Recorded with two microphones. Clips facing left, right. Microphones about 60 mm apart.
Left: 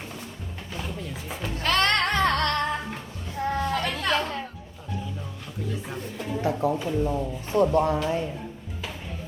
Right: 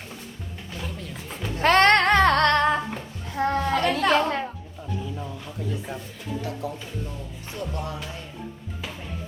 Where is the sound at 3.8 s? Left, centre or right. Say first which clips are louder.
Right 5 dB; right.